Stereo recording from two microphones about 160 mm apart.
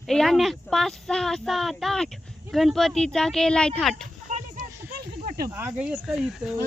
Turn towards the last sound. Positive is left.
turn(degrees=0)  # may be behind; listen again after turning